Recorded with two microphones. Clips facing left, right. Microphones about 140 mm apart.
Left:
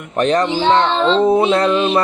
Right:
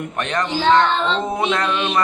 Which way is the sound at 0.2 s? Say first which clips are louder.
Left 7 dB; 35° left (ahead or behind).